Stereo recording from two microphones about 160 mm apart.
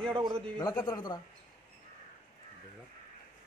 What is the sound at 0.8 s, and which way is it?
Speech, 25° left (ahead or behind).